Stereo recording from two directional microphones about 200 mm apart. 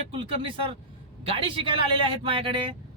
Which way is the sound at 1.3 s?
25° right (ahead or behind).